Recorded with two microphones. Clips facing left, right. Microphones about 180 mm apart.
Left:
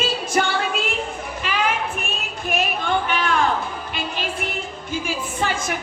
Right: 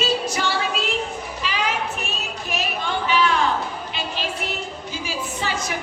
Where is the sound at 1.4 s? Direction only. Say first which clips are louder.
Left 2 dB; 55° left (ahead or behind).